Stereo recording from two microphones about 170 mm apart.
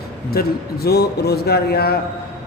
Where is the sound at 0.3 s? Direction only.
65° left (ahead or behind).